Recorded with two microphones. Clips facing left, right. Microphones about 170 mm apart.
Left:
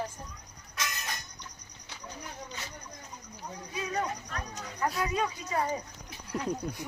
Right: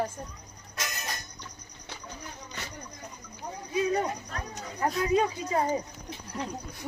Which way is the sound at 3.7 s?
30° right (ahead or behind).